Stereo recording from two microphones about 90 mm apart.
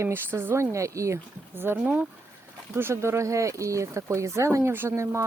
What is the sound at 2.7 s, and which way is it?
Speech, 30° right (ahead or behind).